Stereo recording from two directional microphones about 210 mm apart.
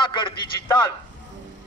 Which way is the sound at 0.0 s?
20° left (ahead or behind).